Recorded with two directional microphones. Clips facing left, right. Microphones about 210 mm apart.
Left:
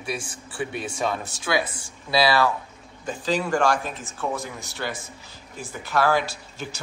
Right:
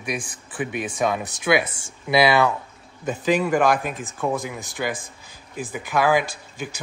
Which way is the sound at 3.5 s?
20° right (ahead or behind).